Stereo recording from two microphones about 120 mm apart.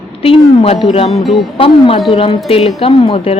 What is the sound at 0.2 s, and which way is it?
Speech, 55° left (ahead or behind).